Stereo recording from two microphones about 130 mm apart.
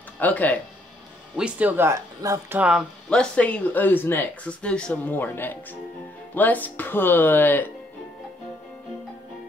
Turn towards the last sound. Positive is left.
turn(degrees=15)  # may be behind; listen again after turning